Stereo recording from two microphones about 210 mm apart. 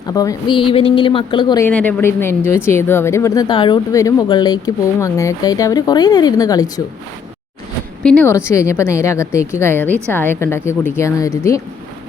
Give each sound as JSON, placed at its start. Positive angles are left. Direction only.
{"t": 0.1, "sound": "speech", "side_deg": 15}
{"t": 1.6, "sound": "speech", "side_deg": 5}
{"t": 8.0, "sound": "speech", "side_deg": 5}